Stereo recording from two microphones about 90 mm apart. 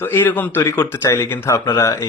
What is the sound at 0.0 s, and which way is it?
Speech, 20° left (ahead or behind).